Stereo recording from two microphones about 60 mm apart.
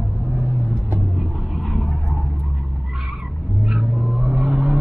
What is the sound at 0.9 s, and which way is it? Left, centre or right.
Vehicle, centre.